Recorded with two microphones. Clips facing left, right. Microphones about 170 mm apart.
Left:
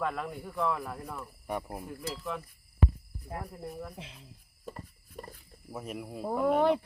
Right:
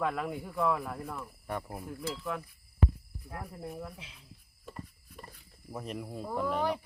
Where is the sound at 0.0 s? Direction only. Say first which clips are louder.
Right 1 dB; 5° right (ahead or behind).